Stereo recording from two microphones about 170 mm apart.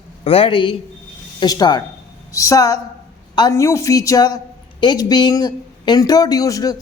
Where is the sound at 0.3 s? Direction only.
35° left (ahead or behind).